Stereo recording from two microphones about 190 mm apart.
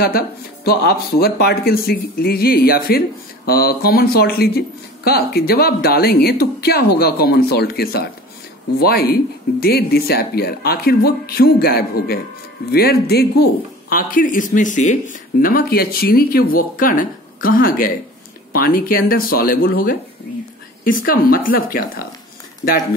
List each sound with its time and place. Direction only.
0.7 s speech: 55° left (ahead or behind)